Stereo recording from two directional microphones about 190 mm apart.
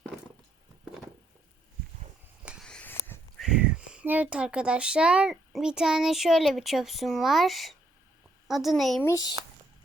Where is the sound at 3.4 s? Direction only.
5° right (ahead or behind).